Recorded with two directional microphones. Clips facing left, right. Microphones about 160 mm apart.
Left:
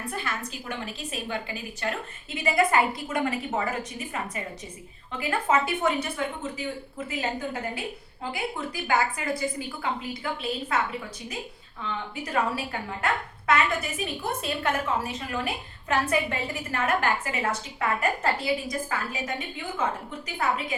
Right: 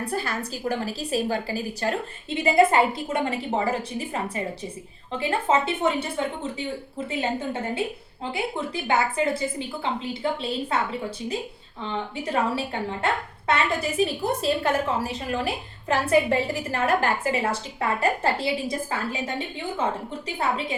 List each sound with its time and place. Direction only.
0.0 s a woman's voice: 35° right (ahead or behind)
11.8 s a woman's voice: 30° right (ahead or behind)